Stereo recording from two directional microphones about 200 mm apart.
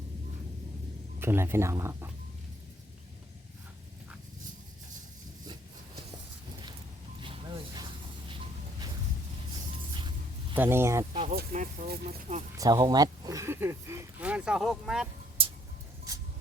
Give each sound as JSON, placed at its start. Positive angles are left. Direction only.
{"t": 1.2, "sound": "speech", "side_deg": -10}
{"t": 7.2, "sound": "a sound", "side_deg": -25}
{"t": 10.5, "sound": "speech", "side_deg": -10}
{"t": 11.3, "sound": "speech", "side_deg": -40}
{"t": 12.5, "sound": "speech", "side_deg": -20}
{"t": 15.4, "sound": "a sound", "side_deg": -25}